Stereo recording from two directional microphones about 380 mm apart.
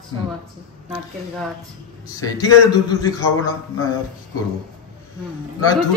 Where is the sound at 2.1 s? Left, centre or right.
Centre.